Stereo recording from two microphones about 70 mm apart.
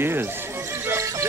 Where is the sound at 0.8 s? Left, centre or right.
Right.